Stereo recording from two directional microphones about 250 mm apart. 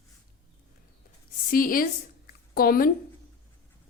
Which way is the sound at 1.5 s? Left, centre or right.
Left.